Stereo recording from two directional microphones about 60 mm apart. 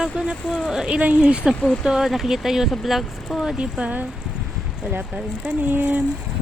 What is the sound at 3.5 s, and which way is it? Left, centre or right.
Speech, centre.